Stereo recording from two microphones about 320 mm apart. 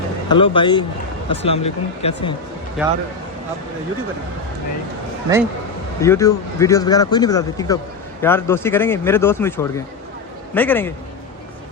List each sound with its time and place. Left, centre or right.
0.3 s speech: centre
2.8 s a man's voice: centre
5.3 s speech: centre
6.0 s a man's voice: centre